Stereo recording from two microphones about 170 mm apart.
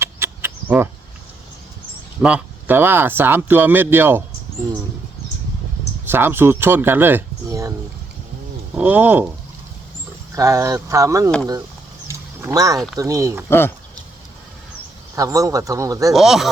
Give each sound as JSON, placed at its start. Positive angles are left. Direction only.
{"t": 0.0, "sound": "cricket", "side_deg": -15}
{"t": 2.2, "sound": "speech", "side_deg": -10}
{"t": 6.1, "sound": "speech", "side_deg": -15}
{"t": 8.7, "sound": "speech", "side_deg": -10}
{"t": 10.3, "sound": "speech", "side_deg": -20}
{"t": 12.0, "sound": "wild animals", "side_deg": -20}
{"t": 13.0, "sound": "speech", "side_deg": -20}
{"t": 13.5, "sound": "speech", "side_deg": 15}
{"t": 15.1, "sound": "speech", "side_deg": -20}
{"t": 16.1, "sound": "speech", "side_deg": 0}